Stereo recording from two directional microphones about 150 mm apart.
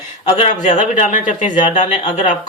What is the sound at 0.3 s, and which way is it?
A man's voice, 45° left (ahead or behind).